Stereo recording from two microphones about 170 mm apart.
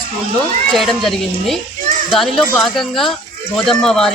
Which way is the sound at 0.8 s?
Centre (ahead or behind).